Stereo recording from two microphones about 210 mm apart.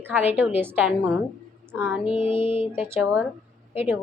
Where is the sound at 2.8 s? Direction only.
10° right (ahead or behind).